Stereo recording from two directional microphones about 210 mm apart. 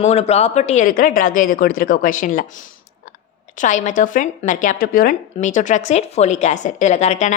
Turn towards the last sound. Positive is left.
turn(degrees=35)  # may be behind; listen again after turning